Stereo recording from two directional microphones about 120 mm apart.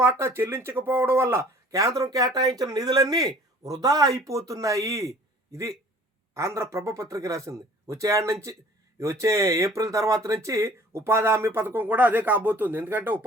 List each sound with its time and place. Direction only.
0.0 s a man's voice: 20° right (ahead or behind)